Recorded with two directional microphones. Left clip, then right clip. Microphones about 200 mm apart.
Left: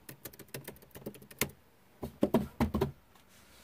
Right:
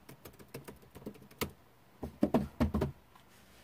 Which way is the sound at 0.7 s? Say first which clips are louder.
Left 2 dB; 35° left (ahead or behind).